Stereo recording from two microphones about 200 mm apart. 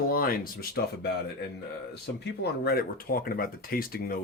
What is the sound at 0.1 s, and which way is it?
Speech, 45° left (ahead or behind).